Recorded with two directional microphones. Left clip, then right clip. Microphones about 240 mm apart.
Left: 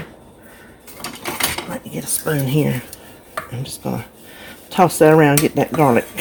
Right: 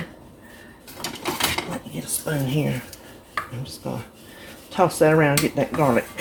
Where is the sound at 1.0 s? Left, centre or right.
Centre.